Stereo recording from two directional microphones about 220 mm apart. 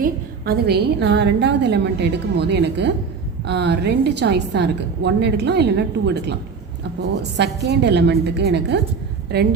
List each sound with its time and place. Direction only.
0.0 s a woman's voice: 45° right (ahead or behind)